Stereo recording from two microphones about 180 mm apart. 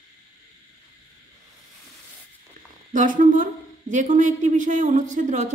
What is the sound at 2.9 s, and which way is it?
Speech, 45° right (ahead or behind).